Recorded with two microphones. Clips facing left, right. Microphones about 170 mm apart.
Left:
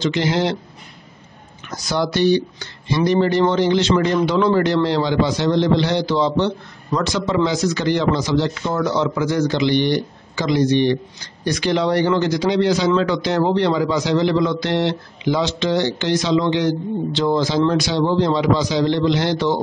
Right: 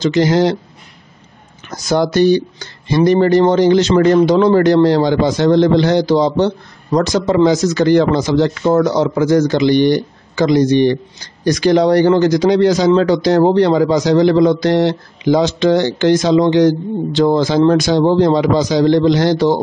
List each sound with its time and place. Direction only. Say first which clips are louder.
0.0 s speech: right 6 dB; 40° right (ahead or behind)
1.9 s speech: right 5 dB; 45° right (ahead or behind)